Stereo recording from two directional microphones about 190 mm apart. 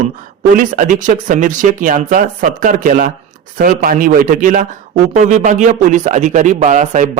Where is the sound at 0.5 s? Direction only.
45° right (ahead or behind).